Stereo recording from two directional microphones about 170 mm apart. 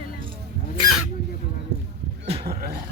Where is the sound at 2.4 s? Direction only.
60° right (ahead or behind).